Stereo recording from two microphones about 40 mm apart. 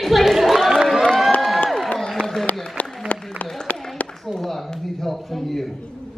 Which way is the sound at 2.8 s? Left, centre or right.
Left.